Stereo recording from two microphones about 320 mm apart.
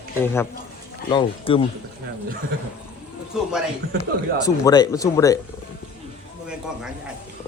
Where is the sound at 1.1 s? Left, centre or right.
Centre.